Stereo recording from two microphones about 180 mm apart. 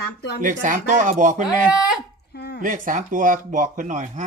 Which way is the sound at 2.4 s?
65° left (ahead or behind).